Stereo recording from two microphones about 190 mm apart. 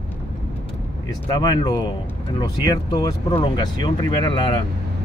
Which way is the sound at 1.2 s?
20° left (ahead or behind).